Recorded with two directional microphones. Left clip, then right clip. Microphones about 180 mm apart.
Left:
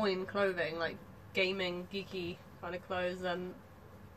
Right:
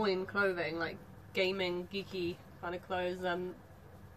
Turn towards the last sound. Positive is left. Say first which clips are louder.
# right 1 dB
turn(degrees=-15)  # may be behind; listen again after turning